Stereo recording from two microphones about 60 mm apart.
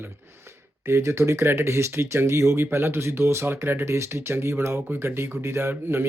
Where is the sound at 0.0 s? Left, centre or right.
Right.